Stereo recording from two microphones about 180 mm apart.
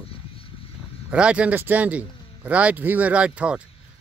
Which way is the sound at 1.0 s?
5° right (ahead or behind).